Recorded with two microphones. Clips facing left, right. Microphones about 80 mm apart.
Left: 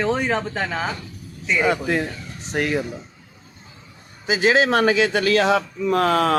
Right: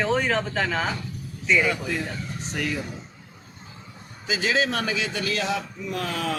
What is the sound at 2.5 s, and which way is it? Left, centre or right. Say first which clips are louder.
Speech: left 7 dB; left.